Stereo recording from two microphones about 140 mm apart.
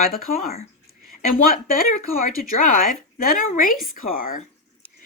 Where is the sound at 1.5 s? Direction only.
70° left (ahead or behind).